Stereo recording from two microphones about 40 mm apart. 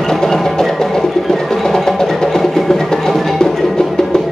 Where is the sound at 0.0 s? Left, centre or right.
Centre.